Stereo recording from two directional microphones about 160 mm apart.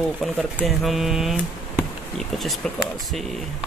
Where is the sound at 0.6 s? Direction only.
Centre (ahead or behind).